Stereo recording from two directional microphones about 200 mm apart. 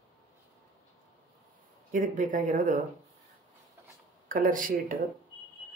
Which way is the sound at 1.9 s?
40° right (ahead or behind).